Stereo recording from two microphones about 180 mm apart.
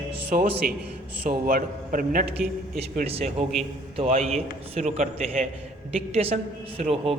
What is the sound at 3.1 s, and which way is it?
A man's voice, 35° right (ahead or behind).